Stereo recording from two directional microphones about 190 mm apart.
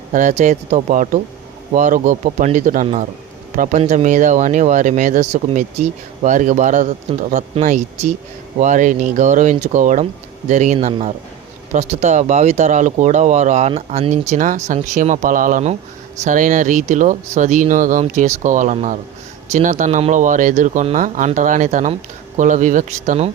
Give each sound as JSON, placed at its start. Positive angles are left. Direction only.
{"t": 0.1, "sound": "speech", "side_deg": -40}